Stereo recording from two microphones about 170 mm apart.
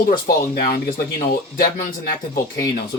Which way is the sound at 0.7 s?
60° left (ahead or behind).